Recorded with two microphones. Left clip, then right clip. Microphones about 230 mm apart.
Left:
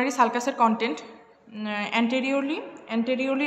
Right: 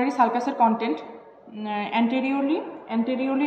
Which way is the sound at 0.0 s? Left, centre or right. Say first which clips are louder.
Right 1 dB; left.